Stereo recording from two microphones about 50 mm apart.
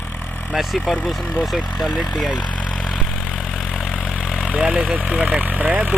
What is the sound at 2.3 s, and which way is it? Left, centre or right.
Vehicle, left.